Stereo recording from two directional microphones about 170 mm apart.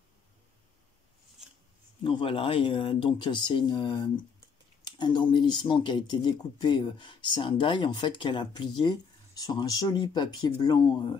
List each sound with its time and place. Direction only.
2.0 s speech: 30° left (ahead or behind)